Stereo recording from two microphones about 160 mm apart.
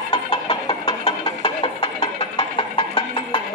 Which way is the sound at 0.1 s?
25° left (ahead or behind).